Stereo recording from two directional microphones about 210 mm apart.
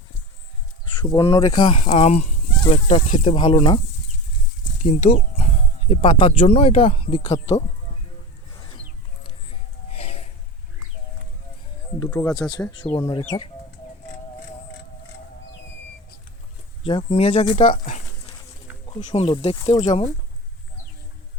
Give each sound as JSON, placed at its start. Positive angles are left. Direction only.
{"t": 0.9, "sound": "speech", "side_deg": 20}
{"t": 4.8, "sound": "speech", "side_deg": 30}
{"t": 9.5, "sound": "music", "side_deg": 30}
{"t": 12.1, "sound": "speech", "side_deg": 5}
{"t": 12.4, "sound": "speech", "side_deg": 20}
{"t": 16.8, "sound": "speech", "side_deg": 25}
{"t": 19.0, "sound": "speech", "side_deg": 25}